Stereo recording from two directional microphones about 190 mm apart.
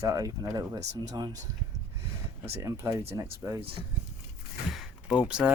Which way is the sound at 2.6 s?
15° right (ahead or behind).